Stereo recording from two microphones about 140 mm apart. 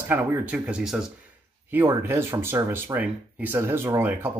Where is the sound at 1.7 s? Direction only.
15° right (ahead or behind).